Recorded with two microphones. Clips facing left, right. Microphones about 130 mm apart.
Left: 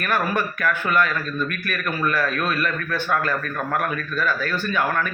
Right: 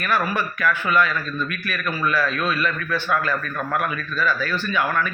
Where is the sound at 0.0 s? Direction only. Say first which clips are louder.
Even; 50° left (ahead or behind).